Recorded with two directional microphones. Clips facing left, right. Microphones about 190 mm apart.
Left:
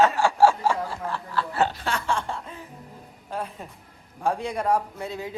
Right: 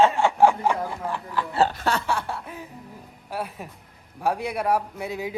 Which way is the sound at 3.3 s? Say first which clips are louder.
Right 1 dB; 10° right (ahead or behind).